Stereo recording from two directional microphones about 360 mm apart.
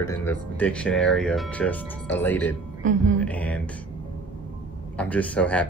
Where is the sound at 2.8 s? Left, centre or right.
Right.